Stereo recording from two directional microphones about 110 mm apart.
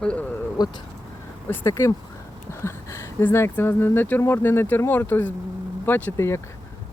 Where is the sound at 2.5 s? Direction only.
25° left (ahead or behind).